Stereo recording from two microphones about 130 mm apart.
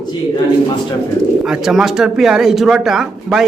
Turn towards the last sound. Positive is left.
turn(degrees=-5)  # may be behind; listen again after turning